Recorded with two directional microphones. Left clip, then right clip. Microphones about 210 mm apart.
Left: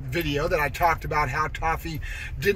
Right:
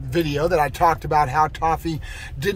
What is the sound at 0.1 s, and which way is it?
Speech, 15° right (ahead or behind).